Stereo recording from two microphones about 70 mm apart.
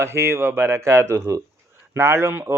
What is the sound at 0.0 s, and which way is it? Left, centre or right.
Speech, right.